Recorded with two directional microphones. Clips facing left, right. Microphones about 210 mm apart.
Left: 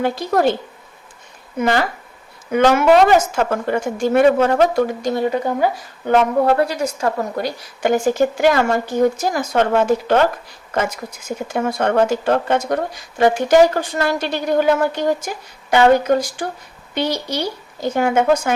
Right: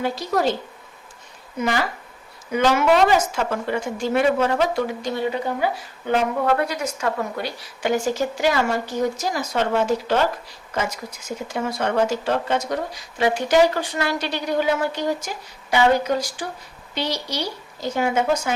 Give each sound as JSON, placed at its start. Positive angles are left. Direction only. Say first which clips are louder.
{"t": 0.0, "sound": "speech", "louder": "left 5 dB", "side_deg": 55}
{"t": 1.5, "sound": "speech", "louder": "left 5 dB", "side_deg": 60}